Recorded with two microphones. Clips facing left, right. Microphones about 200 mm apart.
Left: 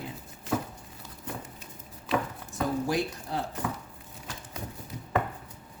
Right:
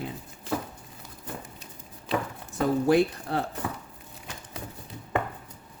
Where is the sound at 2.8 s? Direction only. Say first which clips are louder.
Right 8 dB; 60° right (ahead or behind).